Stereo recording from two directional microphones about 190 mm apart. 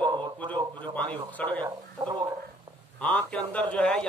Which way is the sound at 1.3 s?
10° left (ahead or behind).